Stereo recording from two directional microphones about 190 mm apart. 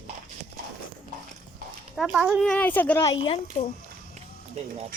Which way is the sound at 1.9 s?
Centre (ahead or behind).